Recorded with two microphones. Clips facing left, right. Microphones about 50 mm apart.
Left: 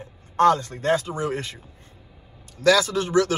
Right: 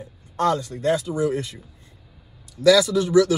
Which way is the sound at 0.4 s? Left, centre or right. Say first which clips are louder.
Left 3 dB; left.